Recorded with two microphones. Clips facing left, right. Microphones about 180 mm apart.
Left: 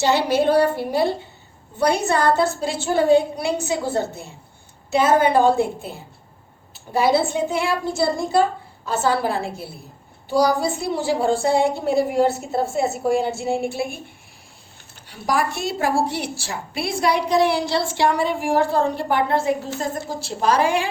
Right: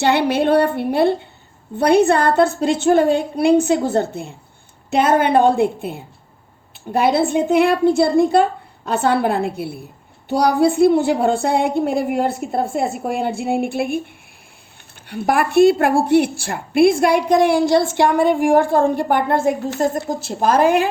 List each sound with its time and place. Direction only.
0.0 s a woman's voice: 60° right (ahead or behind)
15.0 s a woman's voice: 60° right (ahead or behind)